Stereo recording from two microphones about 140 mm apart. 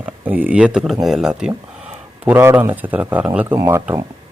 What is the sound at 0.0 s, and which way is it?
Speech, 10° right (ahead or behind).